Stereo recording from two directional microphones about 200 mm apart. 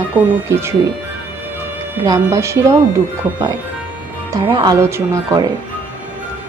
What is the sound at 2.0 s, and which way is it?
Speech, 15° right (ahead or behind).